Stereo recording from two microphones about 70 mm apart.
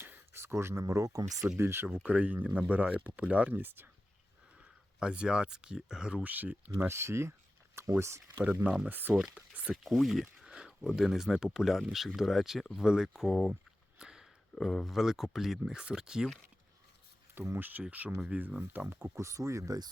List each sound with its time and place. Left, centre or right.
0.0 s a sound: right
1.3 s speech: centre
1.5 s speech: right
2.0 s speech: right
4.9 s speech: centre
6.8 s speech: right
8.9 s speech: right
9.1 s speech: centre
9.8 s speech: centre
14.0 s a sound: centre
14.5 s speech: centre
17.5 s speech: right
19.1 s speech: right